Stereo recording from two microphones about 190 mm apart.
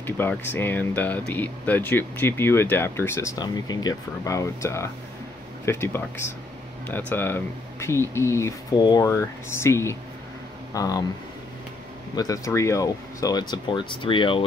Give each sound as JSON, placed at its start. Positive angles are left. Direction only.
{"t": 0.0, "sound": "speech", "side_deg": 10}
{"t": 12.2, "sound": "speech", "side_deg": 15}